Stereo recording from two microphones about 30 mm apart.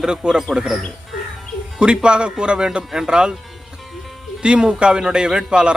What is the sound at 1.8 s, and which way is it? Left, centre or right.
A man's voice, right.